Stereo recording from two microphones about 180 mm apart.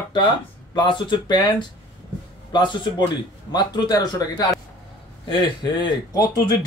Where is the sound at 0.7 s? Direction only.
25° left (ahead or behind).